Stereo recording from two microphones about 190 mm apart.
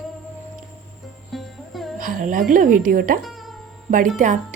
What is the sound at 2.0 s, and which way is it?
A woman's voice, 45° right (ahead or behind).